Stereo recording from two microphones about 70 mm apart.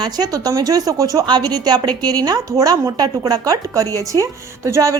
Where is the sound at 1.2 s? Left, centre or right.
Right.